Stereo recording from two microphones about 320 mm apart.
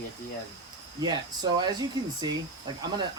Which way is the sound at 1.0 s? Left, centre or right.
Centre.